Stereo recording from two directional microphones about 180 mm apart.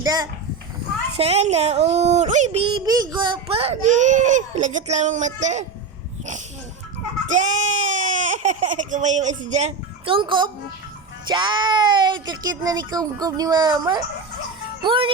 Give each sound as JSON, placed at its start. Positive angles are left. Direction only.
{"t": 0.0, "sound": "speech", "side_deg": -20}
{"t": 1.1, "sound": "a child's voice", "side_deg": -35}
{"t": 2.8, "sound": "a child's voice", "side_deg": -20}
{"t": 7.3, "sound": "a child's voice", "side_deg": -40}